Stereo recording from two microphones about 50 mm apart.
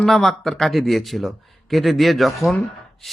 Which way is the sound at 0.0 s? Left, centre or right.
Centre.